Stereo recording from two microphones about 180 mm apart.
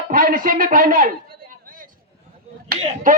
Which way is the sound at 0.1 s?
50° right (ahead or behind).